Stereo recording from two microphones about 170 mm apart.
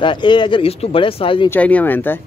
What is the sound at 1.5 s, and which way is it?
Speech, 10° left (ahead or behind).